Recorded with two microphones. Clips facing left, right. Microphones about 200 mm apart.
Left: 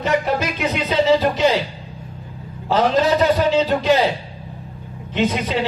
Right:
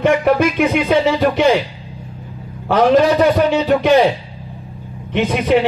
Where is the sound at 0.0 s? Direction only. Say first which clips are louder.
Right 6 dB; 60° right (ahead or behind).